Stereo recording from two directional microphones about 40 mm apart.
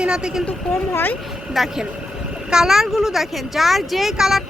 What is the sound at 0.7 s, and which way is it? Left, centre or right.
Speech, left.